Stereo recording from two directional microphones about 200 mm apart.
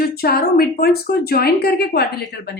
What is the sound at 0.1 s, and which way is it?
Speech, 50° left (ahead or behind).